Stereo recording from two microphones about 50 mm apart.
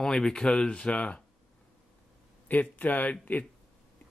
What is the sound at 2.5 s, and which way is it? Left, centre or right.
Speech, left.